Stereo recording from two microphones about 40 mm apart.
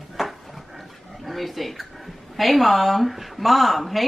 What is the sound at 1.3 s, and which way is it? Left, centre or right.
Speech, centre.